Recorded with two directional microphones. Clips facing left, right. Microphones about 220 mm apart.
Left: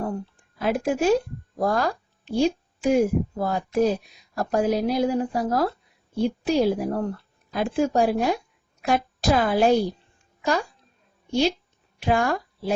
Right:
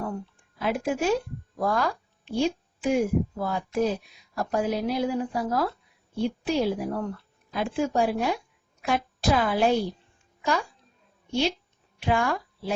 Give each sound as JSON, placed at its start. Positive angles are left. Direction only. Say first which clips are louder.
{"t": 0.6, "sound": "a woman's voice", "louder": "left 4 dB", "side_deg": 40}